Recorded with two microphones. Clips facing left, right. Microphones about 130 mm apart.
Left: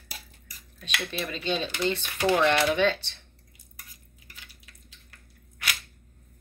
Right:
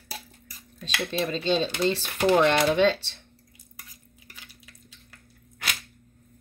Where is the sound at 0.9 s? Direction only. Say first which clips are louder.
Right 5 dB; 30° right (ahead or behind).